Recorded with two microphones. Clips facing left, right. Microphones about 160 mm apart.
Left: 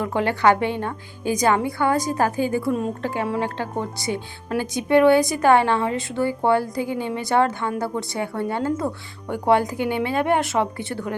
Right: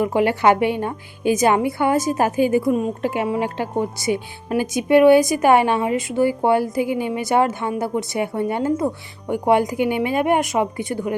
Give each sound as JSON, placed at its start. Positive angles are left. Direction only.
{"t": 0.0, "sound": "a woman's voice", "side_deg": -15}